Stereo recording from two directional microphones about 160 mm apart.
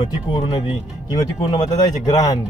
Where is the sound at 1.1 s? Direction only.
30° left (ahead or behind).